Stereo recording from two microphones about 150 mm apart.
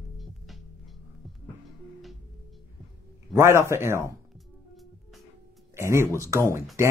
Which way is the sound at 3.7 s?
20° right (ahead or behind).